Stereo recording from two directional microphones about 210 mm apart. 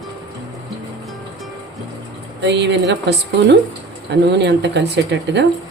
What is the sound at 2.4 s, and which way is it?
Speech, 55° right (ahead or behind).